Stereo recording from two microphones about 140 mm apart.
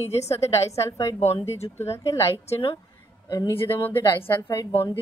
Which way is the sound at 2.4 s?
45° left (ahead or behind).